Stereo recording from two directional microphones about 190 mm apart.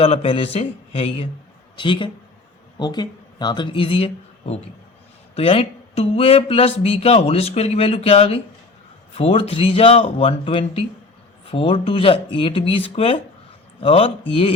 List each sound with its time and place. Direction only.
0.0 s speech: 30° left (ahead or behind)